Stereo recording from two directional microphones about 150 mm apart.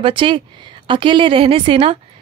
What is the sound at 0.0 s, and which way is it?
A woman's voice, 35° right (ahead or behind).